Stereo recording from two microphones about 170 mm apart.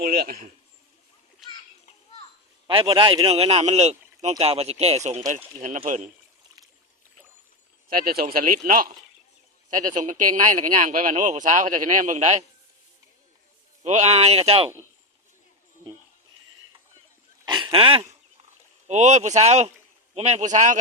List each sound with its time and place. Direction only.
0.0 s speech: 60° right (ahead or behind)
2.6 s speech: 30° right (ahead or behind); by 6.1 s 50° right (ahead or behind)
7.9 s speech: 60° right (ahead or behind); by 12.5 s 45° right (ahead or behind)
13.8 s speech: 40° right (ahead or behind)
17.4 s a sound: 25° right (ahead or behind)
18.9 s speech: 45° right (ahead or behind)